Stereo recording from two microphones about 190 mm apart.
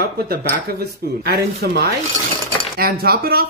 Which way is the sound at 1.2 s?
55° right (ahead or behind).